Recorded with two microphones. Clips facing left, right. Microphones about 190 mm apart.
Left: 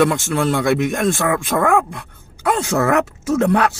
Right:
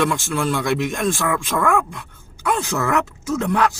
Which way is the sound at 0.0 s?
65° left (ahead or behind).